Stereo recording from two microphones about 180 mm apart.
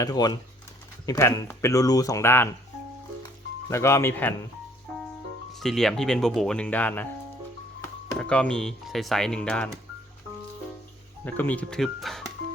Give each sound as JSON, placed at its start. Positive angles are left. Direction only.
{"t": 0.0, "sound": "speech", "side_deg": 20}
{"t": 3.7, "sound": "speech", "side_deg": 15}
{"t": 5.5, "sound": "speech", "side_deg": 0}
{"t": 11.3, "sound": "speech", "side_deg": 10}